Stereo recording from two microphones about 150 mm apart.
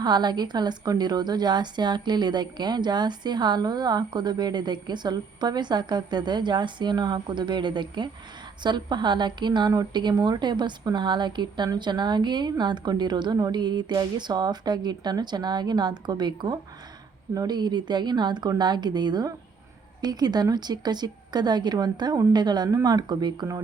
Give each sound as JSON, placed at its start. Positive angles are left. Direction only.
{"t": 0.0, "sound": "a woman's voice", "side_deg": -30}